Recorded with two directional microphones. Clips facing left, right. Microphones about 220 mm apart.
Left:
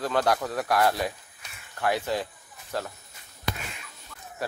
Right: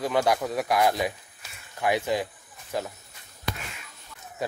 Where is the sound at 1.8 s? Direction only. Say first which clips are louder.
Right 2 dB; 15° right (ahead or behind).